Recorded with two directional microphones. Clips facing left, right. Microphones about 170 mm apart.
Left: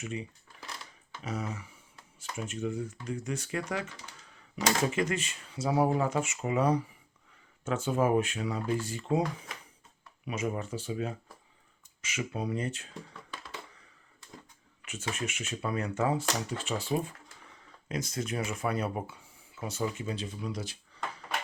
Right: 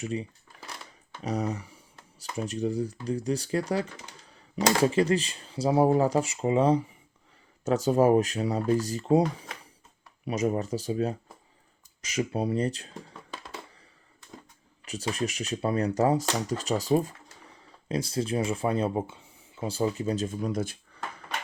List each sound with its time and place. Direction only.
0.0 s speech: 35° right (ahead or behind)
7.6 s speech: 40° right (ahead or behind)
10.2 s speech: 40° right (ahead or behind)
14.8 s speech: 35° right (ahead or behind); by 21.0 s 50° right (ahead or behind)